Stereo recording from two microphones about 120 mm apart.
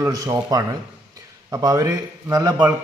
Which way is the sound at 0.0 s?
30° right (ahead or behind).